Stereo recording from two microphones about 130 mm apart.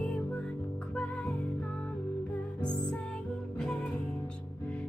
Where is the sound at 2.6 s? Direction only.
35° left (ahead or behind).